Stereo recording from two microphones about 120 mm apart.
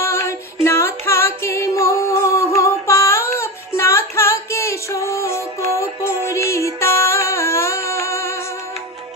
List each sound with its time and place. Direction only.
0.0 s music: 25° left (ahead or behind)